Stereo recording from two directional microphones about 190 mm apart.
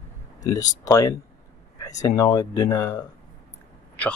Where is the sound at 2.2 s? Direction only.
20° left (ahead or behind).